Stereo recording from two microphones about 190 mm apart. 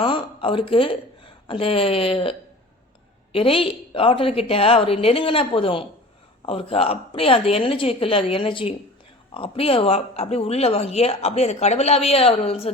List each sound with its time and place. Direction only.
0.0 s speech: 25° left (ahead or behind)
3.3 s a woman's voice: 30° left (ahead or behind)